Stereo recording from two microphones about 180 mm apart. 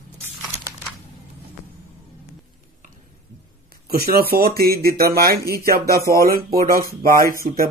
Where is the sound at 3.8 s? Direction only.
55° right (ahead or behind).